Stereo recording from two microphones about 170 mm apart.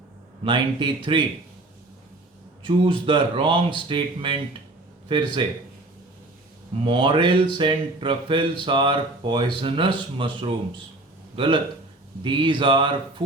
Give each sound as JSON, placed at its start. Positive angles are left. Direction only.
{"t": 0.4, "sound": "speech", "side_deg": -30}
{"t": 2.6, "sound": "speech", "side_deg": -30}
{"t": 6.8, "sound": "speech", "side_deg": -30}